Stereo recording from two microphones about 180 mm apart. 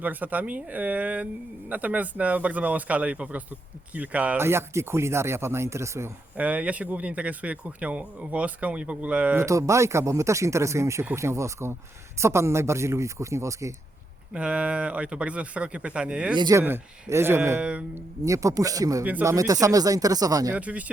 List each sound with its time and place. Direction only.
0.0 s speech: 10° right (ahead or behind)
14.3 s speech: 5° right (ahead or behind)
16.3 s speech: 20° right (ahead or behind); by 18.0 s 5° right (ahead or behind)
18.3 s speech: 20° right (ahead or behind)
20.6 s speech: 10° right (ahead or behind)